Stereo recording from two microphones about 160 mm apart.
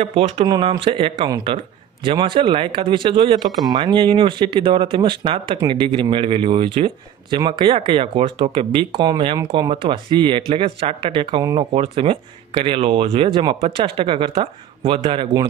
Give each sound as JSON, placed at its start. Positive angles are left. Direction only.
{"t": 0.0, "sound": "speech", "side_deg": -35}